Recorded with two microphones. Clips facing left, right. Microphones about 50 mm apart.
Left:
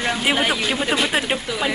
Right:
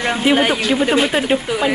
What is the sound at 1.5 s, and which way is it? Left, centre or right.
Speech, right.